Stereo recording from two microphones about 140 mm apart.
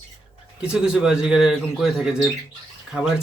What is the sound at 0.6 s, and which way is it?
Speech, 5° right (ahead or behind).